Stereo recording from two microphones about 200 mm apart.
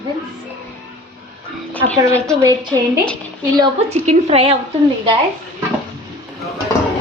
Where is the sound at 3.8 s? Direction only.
35° right (ahead or behind).